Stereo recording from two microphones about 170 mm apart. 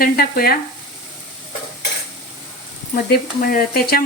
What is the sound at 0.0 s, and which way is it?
Speech, 60° left (ahead or behind).